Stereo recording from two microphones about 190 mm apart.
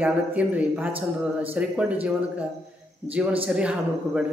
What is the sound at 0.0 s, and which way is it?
A man's voice, 5° right (ahead or behind).